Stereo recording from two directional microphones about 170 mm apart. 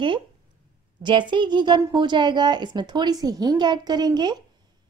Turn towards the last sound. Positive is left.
turn(degrees=-25)  # may be behind; listen again after turning